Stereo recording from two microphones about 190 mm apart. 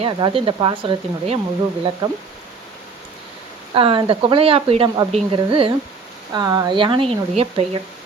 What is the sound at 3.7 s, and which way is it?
Speech, 25° right (ahead or behind).